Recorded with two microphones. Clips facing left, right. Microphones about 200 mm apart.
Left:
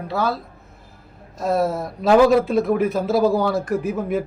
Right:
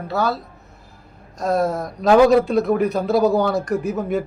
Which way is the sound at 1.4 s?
5° left (ahead or behind).